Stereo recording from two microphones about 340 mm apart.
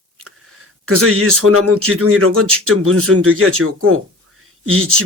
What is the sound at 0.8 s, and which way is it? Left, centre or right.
Speech, right.